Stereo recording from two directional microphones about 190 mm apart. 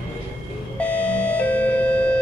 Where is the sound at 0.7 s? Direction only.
5° left (ahead or behind).